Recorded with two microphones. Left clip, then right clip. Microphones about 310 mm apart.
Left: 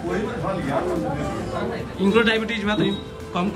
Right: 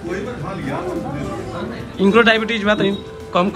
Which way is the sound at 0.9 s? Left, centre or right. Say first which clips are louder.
Even; centre.